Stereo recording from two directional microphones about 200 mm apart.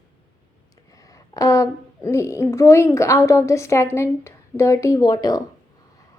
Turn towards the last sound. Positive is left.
turn(degrees=20)  # may be behind; listen again after turning